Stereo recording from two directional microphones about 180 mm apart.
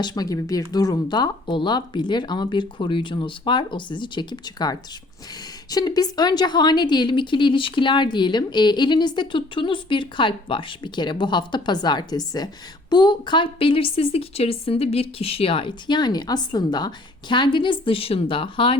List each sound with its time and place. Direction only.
0.0 s a woman's voice: 20° left (ahead or behind)